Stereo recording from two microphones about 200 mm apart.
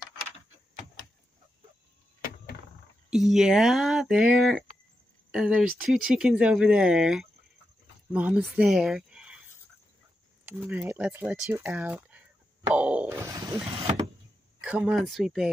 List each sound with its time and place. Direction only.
3.1 s speech: centre (ahead or behind)
10.4 s speech: 10° right (ahead or behind)
13.7 s power windows: 30° right (ahead or behind)
14.6 s speech: 5° right (ahead or behind)